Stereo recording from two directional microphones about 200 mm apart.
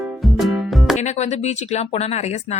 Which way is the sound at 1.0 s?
35° left (ahead or behind).